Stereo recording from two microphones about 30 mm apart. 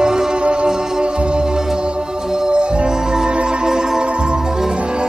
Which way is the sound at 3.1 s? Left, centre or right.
Right.